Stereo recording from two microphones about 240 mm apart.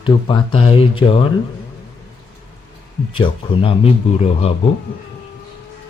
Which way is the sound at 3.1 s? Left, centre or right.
Left.